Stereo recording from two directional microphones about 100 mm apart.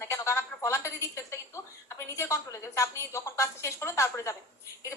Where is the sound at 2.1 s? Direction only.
30° left (ahead or behind).